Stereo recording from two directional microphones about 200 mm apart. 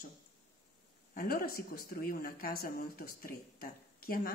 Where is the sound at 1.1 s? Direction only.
50° left (ahead or behind).